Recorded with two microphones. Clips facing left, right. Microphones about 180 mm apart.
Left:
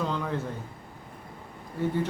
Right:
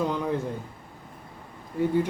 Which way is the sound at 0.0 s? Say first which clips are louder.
Right 3 dB; 15° right (ahead or behind).